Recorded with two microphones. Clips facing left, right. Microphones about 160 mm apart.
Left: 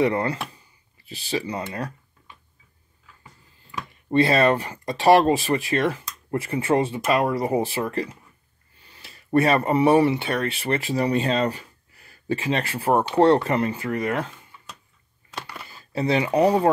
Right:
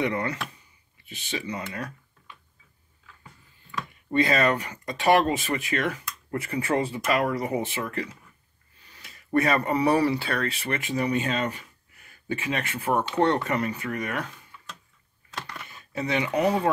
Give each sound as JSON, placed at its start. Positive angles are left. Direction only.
{"t": 0.0, "sound": "speech", "side_deg": 30}
{"t": 4.1, "sound": "speech", "side_deg": 25}
{"t": 15.6, "sound": "speech", "side_deg": 30}